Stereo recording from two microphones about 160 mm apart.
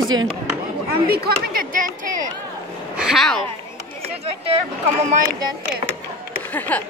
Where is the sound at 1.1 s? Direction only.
70° right (ahead or behind).